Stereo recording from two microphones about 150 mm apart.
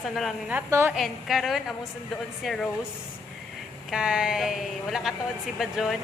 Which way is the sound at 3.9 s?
5° right (ahead or behind).